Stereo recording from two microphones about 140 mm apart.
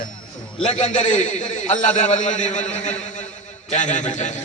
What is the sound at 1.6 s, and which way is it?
A man's voice, 55° left (ahead or behind).